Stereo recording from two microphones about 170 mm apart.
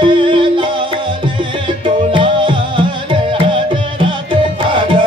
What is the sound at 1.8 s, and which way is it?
Music, 30° right (ahead or behind).